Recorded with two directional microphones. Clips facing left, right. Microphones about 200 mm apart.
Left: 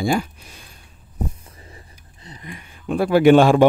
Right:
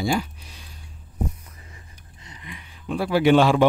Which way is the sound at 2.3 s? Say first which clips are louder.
Left 4 dB; 45° left (ahead or behind).